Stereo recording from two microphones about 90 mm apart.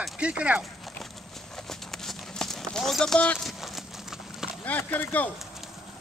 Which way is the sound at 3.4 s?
Centre (ahead or behind).